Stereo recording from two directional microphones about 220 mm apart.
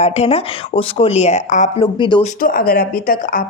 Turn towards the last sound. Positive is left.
turn(degrees=40)  # may be behind; listen again after turning